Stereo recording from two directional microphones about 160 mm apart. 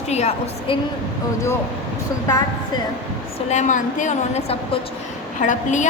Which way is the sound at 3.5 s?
50° left (ahead or behind).